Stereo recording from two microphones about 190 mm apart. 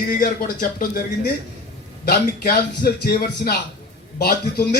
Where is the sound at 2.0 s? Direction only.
50° left (ahead or behind).